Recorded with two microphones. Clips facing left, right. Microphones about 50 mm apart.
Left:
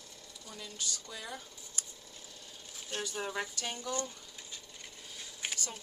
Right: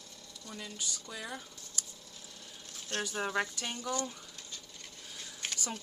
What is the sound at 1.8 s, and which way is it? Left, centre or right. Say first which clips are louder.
Scissors: right 1 dB; left.